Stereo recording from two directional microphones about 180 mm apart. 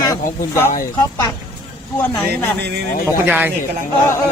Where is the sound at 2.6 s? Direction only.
65° right (ahead or behind).